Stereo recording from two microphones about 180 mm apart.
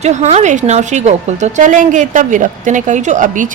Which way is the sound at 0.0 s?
40° right (ahead or behind).